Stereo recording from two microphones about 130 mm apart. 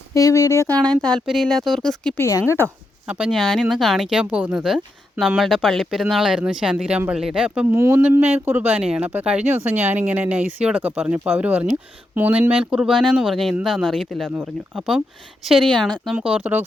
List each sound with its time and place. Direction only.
0.1 s speech: 25° left (ahead or behind)
0.7 s speech: 5° left (ahead or behind)
2.1 s speech: 20° left (ahead or behind)
3.1 s speech: 5° right (ahead or behind)